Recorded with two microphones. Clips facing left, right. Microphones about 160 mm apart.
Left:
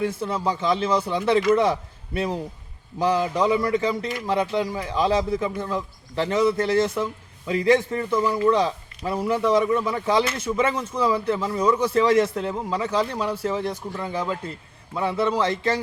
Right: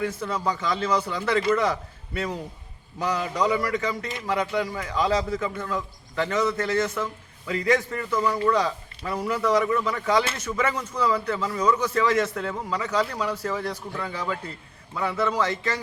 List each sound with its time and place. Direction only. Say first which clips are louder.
0.0 s a man's voice: left 2 dB; 25° left (ahead or behind)